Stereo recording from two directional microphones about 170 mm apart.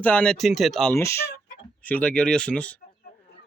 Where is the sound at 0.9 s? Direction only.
15° left (ahead or behind).